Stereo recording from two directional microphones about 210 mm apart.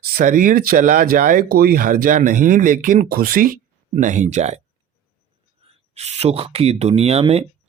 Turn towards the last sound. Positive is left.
turn(degrees=-30)  # may be behind; listen again after turning